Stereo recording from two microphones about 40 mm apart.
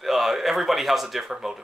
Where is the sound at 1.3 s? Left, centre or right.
Centre.